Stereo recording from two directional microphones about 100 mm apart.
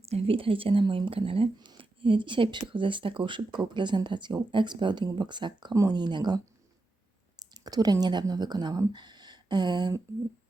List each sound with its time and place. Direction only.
0.1 s speech: 75° right (ahead or behind)
1.5 s speech: 50° right (ahead or behind)
8.9 s a sound: 45° right (ahead or behind)